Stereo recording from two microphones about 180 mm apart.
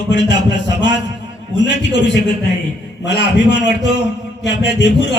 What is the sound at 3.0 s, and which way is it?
A man's voice, 75° left (ahead or behind).